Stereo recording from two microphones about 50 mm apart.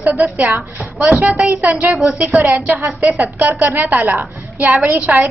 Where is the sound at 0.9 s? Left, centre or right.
Centre.